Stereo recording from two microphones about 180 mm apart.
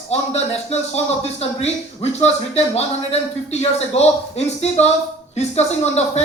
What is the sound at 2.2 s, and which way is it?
A woman's voice, 35° left (ahead or behind).